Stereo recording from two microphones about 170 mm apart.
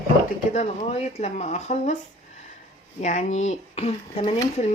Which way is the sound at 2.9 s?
45° left (ahead or behind).